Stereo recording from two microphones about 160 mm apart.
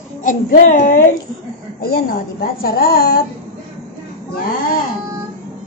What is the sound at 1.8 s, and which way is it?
A woman's voice, 70° left (ahead or behind).